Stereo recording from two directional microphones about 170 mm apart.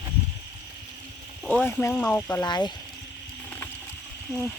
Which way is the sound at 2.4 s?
25° left (ahead or behind).